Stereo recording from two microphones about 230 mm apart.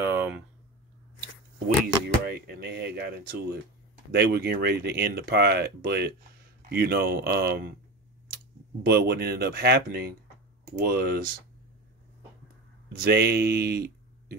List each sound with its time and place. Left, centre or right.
0.0 s a sound: centre
2.2 s speech: right
8.8 s speech: right
12.9 s speech: right